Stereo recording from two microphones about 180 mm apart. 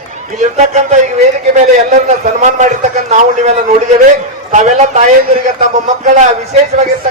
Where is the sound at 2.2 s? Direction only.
45° right (ahead or behind).